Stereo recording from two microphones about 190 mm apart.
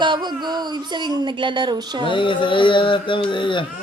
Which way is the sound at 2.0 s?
25° left (ahead or behind).